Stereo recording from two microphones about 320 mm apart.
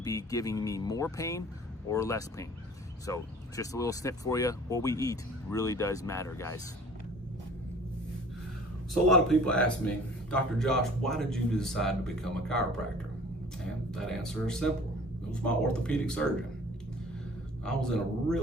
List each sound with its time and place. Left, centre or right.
0.0 s speech: centre
9.0 s speech: centre
13.9 s speech: centre
17.7 s speech: centre